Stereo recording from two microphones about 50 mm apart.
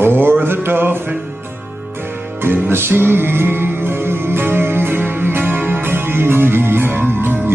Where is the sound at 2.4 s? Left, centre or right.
Right.